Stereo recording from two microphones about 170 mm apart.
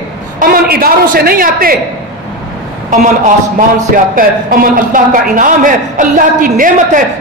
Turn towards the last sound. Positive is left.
turn(degrees=-50)  # may be behind; listen again after turning